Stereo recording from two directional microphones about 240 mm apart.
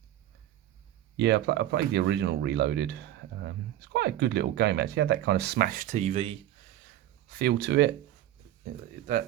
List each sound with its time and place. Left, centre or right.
1.1 s speech: right
7.3 s speech: right